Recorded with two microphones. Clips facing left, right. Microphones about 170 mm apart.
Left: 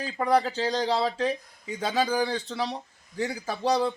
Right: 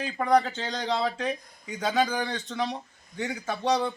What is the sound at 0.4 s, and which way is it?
Speech, 35° left (ahead or behind).